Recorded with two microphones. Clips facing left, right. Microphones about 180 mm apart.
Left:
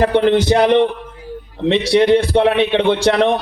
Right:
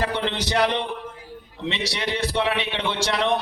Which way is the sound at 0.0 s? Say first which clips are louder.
Left 12 dB; 50° left (ahead or behind).